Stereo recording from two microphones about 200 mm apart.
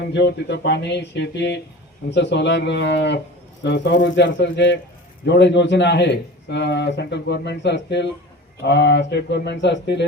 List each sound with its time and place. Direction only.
0.0 s a man's voice: 60° left (ahead or behind)